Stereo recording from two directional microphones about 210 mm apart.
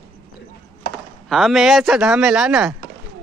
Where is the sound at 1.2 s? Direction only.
Centre (ahead or behind).